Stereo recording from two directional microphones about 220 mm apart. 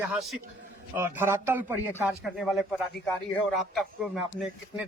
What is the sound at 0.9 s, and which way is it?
A man's voice, 10° right (ahead or behind).